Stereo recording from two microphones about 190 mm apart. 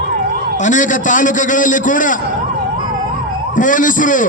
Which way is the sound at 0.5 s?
40° left (ahead or behind).